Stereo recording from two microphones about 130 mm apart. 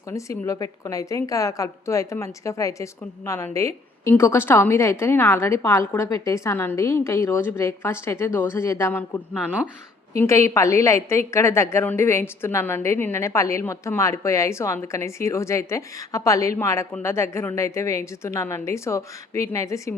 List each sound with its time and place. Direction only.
0.1 s a woman's voice: 25° left (ahead or behind)